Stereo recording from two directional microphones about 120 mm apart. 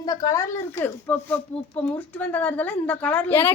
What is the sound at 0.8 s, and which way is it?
A woman's voice, 15° left (ahead or behind).